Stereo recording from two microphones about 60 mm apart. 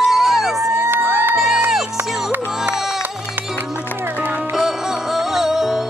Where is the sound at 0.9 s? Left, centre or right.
Right.